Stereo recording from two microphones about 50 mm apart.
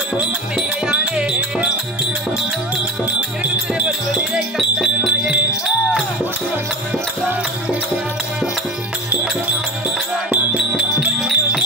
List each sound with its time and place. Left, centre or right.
0.2 s music: right
4.1 s music: centre
10.3 s music: centre
11.1 s music: centre